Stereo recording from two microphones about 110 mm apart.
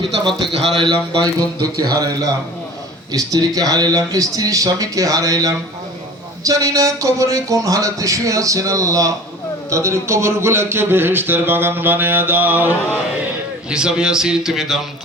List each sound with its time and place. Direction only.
0.5 s a man's voice: centre (ahead or behind)
0.8 s a man's voice: 45° right (ahead or behind); by 14.8 s centre (ahead or behind)